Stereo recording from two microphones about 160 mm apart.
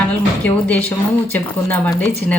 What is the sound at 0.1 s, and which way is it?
Speech, 10° left (ahead or behind).